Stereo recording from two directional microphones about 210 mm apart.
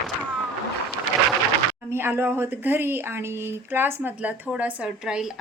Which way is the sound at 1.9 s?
10° right (ahead or behind).